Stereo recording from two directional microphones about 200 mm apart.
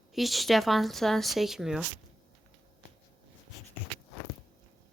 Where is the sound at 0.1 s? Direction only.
Centre (ahead or behind).